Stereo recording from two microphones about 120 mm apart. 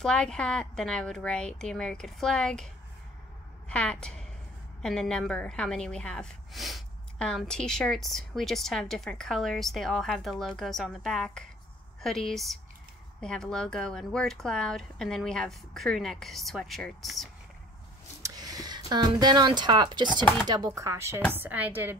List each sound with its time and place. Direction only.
0.0 s a woman's voice: 5° left (ahead or behind)
18.2 s a sound: 30° right (ahead or behind)
18.9 s a woman's voice: 35° right (ahead or behind); by 21.9 s 15° right (ahead or behind)